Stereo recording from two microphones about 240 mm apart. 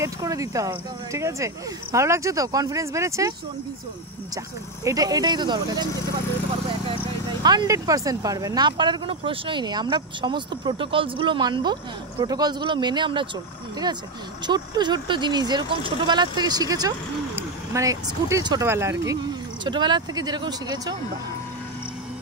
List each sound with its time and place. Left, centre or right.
0.0 s speech: centre
4.8 s speech: centre
7.4 s speech: centre
14.4 s speech: centre